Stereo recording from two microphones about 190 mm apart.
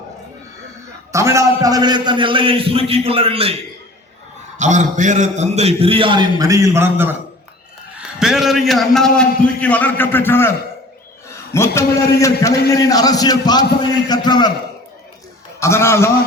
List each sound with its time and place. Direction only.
1.1 s a man's voice: 15° right (ahead or behind); by 10.5 s 10° left (ahead or behind)
11.5 s a man's voice: 15° left (ahead or behind)
15.6 s a man's voice: 15° left (ahead or behind)